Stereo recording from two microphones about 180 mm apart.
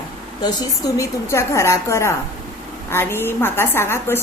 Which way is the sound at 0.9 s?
15° left (ahead or behind).